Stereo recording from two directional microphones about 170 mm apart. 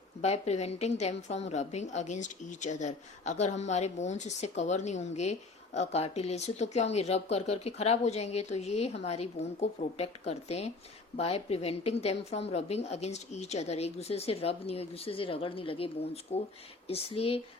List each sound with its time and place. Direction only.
0.2 s a woman's voice: 40° left (ahead or behind)